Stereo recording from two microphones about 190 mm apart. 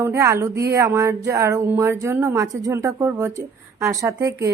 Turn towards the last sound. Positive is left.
turn(degrees=-15)  # may be behind; listen again after turning